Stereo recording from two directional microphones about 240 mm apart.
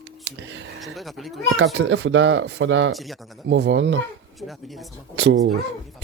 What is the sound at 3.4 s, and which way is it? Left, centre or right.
Speech, right.